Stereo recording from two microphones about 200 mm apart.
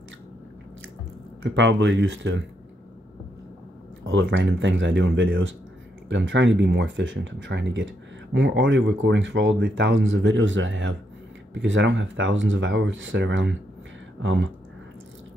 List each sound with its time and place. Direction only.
1.4 s speech: 65° right (ahead or behind)
4.1 s speech: 65° right (ahead or behind)